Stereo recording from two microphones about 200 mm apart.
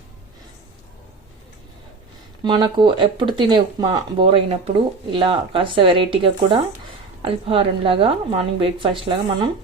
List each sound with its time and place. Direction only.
2.4 s speech: 20° right (ahead or behind)